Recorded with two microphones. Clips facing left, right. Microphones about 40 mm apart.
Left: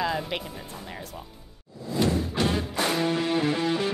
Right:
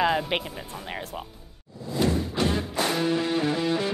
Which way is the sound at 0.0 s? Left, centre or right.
Right.